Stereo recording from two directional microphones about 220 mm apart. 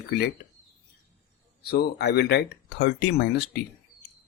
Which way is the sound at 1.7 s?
45° left (ahead or behind).